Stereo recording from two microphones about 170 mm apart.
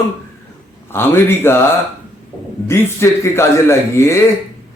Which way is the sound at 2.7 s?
15° left (ahead or behind).